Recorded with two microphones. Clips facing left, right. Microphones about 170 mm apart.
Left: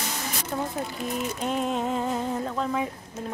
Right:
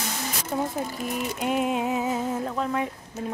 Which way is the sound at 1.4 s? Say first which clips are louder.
Right 3 dB; 10° right (ahead or behind).